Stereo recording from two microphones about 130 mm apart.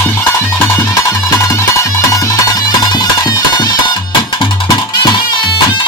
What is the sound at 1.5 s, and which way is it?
Music, 20° left (ahead or behind).